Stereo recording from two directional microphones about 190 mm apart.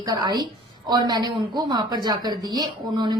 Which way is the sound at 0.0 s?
20° right (ahead or behind).